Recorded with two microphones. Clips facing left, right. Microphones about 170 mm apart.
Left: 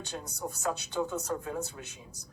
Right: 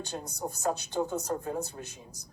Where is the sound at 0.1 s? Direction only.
35° right (ahead or behind).